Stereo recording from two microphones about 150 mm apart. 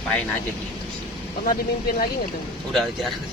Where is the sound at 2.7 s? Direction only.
Centre (ahead or behind).